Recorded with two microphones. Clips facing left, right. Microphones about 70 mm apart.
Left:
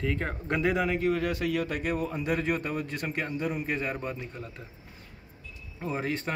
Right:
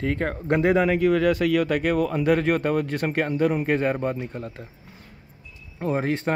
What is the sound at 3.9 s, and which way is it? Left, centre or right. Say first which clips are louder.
Speech: right 8 dB; right.